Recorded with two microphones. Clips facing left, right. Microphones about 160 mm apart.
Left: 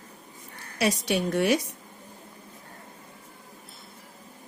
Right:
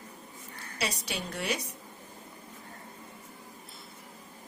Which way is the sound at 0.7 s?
55° left (ahead or behind).